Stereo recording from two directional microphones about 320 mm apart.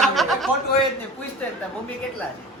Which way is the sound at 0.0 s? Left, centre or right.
Centre.